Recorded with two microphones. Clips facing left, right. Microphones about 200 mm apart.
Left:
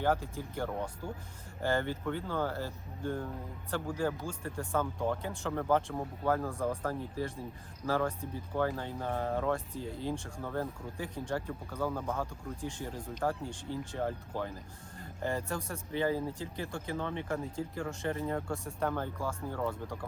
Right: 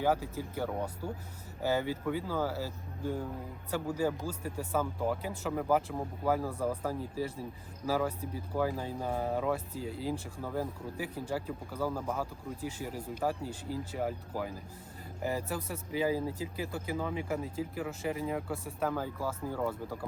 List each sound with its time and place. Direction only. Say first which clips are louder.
0.0 s speech: right 1 dB; 5° right (ahead or behind)